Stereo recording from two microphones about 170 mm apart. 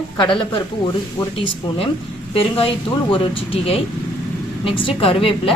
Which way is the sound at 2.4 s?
35° left (ahead or behind).